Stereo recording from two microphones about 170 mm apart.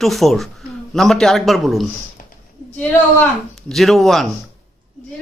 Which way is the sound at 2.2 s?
55° left (ahead or behind).